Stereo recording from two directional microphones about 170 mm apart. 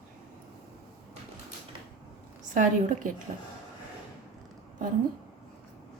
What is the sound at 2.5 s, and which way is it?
Speech, 50° right (ahead or behind).